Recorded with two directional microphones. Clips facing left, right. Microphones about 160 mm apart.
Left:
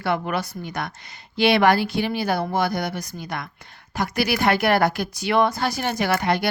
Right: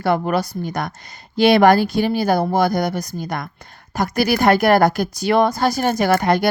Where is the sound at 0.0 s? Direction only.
40° right (ahead or behind).